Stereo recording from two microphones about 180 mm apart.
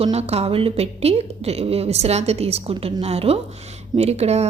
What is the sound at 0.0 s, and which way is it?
A woman's voice, 35° right (ahead or behind).